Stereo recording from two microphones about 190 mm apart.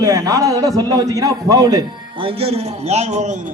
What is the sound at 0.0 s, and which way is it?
A man's voice, 20° right (ahead or behind).